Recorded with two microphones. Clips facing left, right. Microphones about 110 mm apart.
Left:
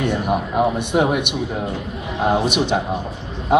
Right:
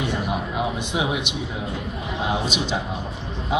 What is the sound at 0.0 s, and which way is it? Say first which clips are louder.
A man's voice: left 5 dB; 50° left (ahead or behind).